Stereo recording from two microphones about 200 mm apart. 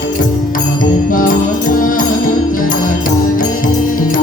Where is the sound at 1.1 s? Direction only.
45° left (ahead or behind).